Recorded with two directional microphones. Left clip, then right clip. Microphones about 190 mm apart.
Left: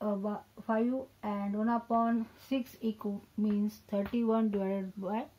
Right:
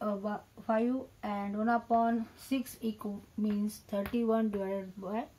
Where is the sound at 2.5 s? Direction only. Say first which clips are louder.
Left 1 dB; 40° left (ahead or behind).